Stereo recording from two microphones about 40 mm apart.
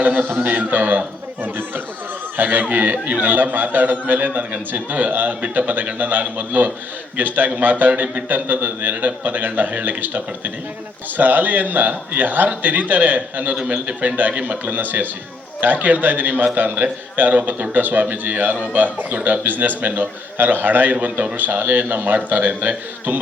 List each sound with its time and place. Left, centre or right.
0.0 s a man's voice: right
2.9 s a man's voice: right
3.2 s a man's voice: right